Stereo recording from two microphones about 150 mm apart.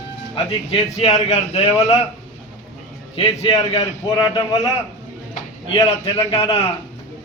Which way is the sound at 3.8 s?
25° left (ahead or behind).